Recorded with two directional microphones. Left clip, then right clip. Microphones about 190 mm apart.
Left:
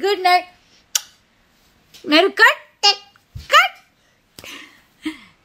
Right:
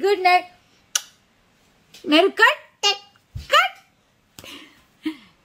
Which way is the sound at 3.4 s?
5° left (ahead or behind).